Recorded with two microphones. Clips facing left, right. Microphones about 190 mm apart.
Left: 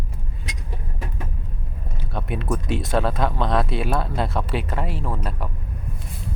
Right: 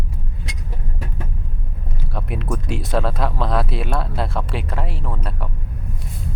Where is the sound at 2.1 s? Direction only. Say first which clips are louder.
Left 1 dB; centre (ahead or behind).